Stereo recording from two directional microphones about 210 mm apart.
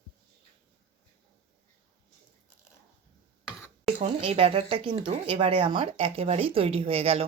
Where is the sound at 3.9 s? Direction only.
30° right (ahead or behind).